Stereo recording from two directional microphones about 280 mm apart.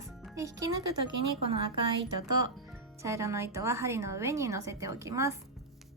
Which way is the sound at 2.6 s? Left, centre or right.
Centre.